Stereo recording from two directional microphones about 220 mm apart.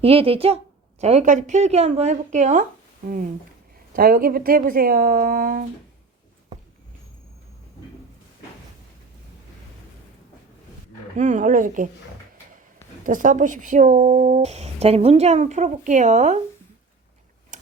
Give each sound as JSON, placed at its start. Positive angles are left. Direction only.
{"t": 0.0, "sound": "a woman's voice", "side_deg": -25}
{"t": 11.2, "sound": "a woman's voice", "side_deg": -35}
{"t": 13.1, "sound": "a woman's voice", "side_deg": -35}
{"t": 17.5, "sound": "tick-tock", "side_deg": -35}